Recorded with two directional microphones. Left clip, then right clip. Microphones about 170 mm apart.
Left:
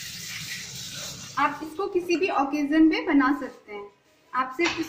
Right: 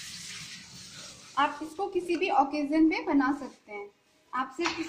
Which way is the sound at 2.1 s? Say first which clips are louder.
Even; 35° right (ahead or behind).